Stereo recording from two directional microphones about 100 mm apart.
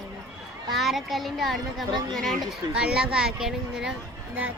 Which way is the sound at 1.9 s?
45° right (ahead or behind).